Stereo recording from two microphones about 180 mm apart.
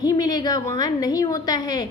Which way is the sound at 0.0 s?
20° left (ahead or behind).